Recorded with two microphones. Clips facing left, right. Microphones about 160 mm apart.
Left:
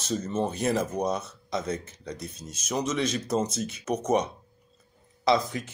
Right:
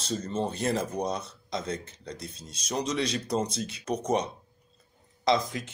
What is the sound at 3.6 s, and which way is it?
Speech, 30° right (ahead or behind).